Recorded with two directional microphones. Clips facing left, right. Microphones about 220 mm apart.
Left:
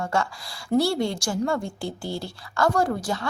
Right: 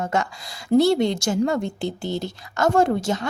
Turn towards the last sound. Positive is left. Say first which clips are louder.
# right 5 dB
turn(degrees=-20)  # may be behind; listen again after turning